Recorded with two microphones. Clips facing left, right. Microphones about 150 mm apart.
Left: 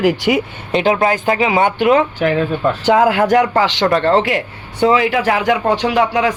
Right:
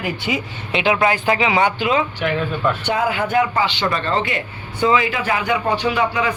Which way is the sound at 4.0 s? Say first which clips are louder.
Left 7 dB; 80° left.